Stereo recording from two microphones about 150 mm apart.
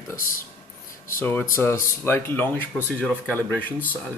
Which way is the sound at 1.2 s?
15° left (ahead or behind).